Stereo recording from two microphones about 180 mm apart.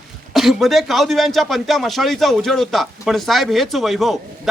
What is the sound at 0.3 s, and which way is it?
Speech, centre (ahead or behind).